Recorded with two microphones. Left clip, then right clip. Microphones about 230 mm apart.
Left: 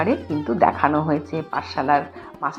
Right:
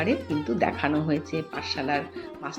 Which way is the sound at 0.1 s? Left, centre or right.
Centre.